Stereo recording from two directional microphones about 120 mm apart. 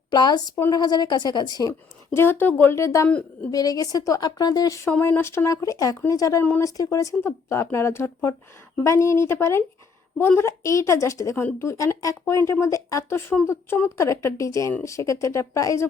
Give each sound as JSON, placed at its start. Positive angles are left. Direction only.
{"t": 0.1, "sound": "a woman's voice", "side_deg": 35}
{"t": 2.1, "sound": "speech", "side_deg": 20}
{"t": 3.1, "sound": "a woman's voice", "side_deg": 10}
{"t": 3.5, "sound": "a woman's voice", "side_deg": 30}
{"t": 4.9, "sound": "speech", "side_deg": 15}